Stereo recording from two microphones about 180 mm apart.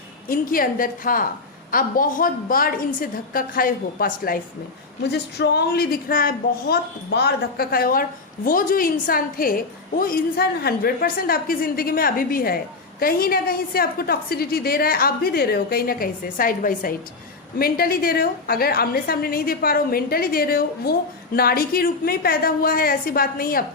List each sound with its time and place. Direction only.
0.3 s a woman's voice: 50° left (ahead or behind)
5.0 s a woman's voice: 65° left (ahead or behind)